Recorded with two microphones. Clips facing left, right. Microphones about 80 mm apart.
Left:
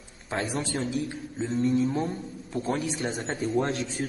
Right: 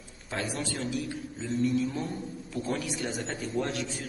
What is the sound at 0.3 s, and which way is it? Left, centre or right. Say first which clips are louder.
A man's voice: left 4 dB; left.